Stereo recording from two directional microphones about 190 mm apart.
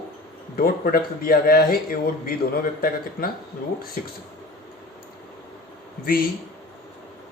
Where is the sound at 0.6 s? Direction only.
50° left (ahead or behind).